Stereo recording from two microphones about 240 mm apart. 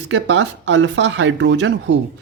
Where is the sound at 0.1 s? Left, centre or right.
Right.